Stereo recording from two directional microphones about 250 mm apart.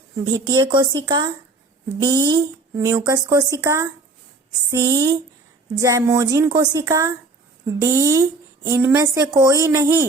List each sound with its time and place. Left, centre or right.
0.3 s speech: centre